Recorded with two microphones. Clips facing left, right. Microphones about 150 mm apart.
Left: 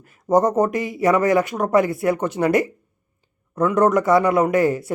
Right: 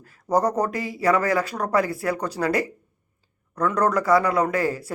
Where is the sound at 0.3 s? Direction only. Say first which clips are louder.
Left 5 dB; 25° left (ahead or behind).